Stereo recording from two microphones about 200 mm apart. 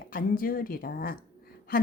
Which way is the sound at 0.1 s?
45° left (ahead or behind).